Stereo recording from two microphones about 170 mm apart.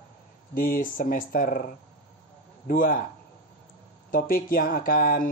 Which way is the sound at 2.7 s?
55° left (ahead or behind).